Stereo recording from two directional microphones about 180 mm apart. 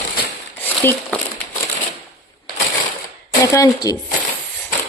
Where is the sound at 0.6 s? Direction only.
10° left (ahead or behind).